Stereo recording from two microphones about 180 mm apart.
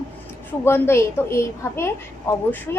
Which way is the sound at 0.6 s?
15° left (ahead or behind).